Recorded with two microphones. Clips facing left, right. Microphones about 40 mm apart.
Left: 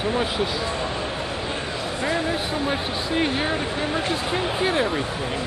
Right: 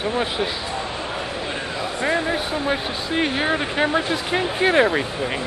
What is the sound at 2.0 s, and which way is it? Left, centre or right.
Speech, right.